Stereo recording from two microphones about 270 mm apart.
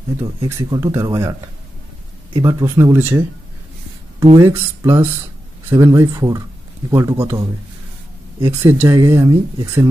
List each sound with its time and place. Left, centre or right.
0.2 s speech: centre
2.3 s speech: centre
4.2 s speech: right
4.5 s speech: centre